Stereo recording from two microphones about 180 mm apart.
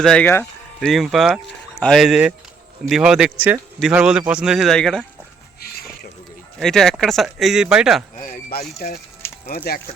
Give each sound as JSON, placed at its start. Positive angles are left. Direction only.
{"t": 0.0, "sound": "speech", "side_deg": 5}
{"t": 0.9, "sound": "speech", "side_deg": 0}
{"t": 5.5, "sound": "a sound", "side_deg": 60}
{"t": 6.6, "sound": "speech", "side_deg": 5}
{"t": 8.2, "sound": "speech", "side_deg": 55}